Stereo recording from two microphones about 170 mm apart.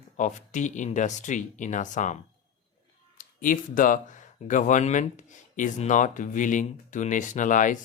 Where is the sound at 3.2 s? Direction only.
50° left (ahead or behind).